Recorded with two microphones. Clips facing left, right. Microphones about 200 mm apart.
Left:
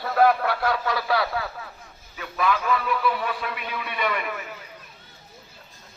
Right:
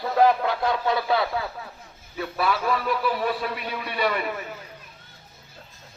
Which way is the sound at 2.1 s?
35° right (ahead or behind).